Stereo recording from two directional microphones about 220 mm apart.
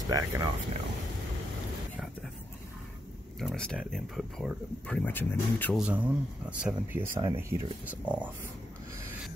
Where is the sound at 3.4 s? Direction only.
Centre (ahead or behind).